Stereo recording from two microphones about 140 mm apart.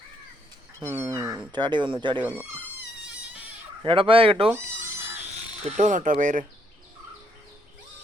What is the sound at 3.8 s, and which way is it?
Speech, 40° right (ahead or behind).